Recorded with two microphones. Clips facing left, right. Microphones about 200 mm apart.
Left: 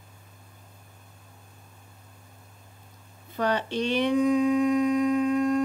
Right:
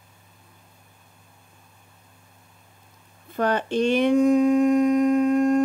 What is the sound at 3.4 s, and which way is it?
Speech, 50° right (ahead or behind).